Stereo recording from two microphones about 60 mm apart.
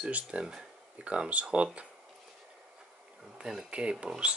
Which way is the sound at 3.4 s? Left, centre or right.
Centre.